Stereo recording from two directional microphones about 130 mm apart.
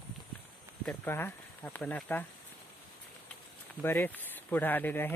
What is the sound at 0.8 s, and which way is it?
Speech, 15° left (ahead or behind).